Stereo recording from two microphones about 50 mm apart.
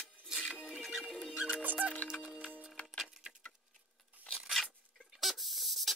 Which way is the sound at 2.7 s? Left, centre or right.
Left.